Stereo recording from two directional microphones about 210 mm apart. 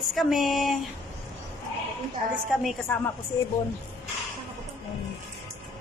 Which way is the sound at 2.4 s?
Centre (ahead or behind).